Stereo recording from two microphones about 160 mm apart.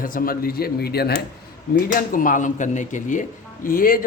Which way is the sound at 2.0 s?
55° left (ahead or behind).